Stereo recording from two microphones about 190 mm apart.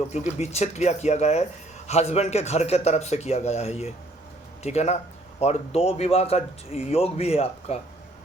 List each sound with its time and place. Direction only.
0.1 s speech: 35° left (ahead or behind)